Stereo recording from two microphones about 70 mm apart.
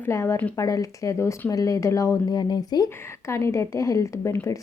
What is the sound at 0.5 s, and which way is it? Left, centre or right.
Speech, left.